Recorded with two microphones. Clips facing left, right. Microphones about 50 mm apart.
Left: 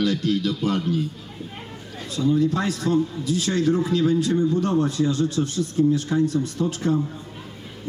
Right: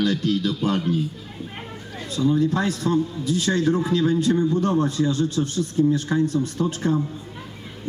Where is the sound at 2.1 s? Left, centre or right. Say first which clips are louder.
Even; right.